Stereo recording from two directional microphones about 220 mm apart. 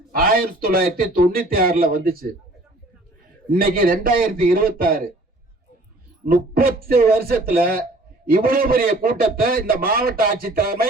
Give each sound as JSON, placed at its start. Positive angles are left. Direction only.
{"t": 0.1, "sound": "a man's voice", "side_deg": -40}
{"t": 3.5, "sound": "a man's voice", "side_deg": -40}
{"t": 6.2, "sound": "a man's voice", "side_deg": -40}